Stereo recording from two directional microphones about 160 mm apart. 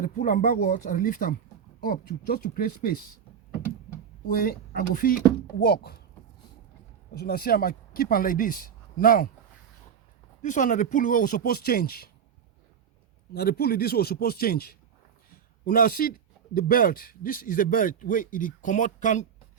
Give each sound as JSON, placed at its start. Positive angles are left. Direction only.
{"t": 0.0, "sound": "speech", "side_deg": 60}
{"t": 4.3, "sound": "speech", "side_deg": 65}
{"t": 7.1, "sound": "speech", "side_deg": 75}
{"t": 10.4, "sound": "speech", "side_deg": 50}
{"t": 13.3, "sound": "a man's voice", "side_deg": 80}